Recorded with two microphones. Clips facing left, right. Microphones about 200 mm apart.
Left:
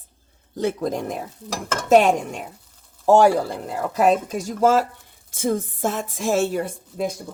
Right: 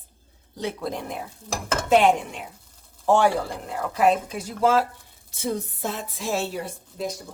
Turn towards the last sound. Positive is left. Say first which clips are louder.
# left 5 dB
turn(degrees=55)  # may be behind; listen again after turning